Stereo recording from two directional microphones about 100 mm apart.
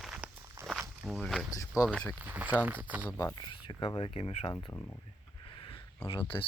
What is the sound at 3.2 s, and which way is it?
Speech, 50° left (ahead or behind).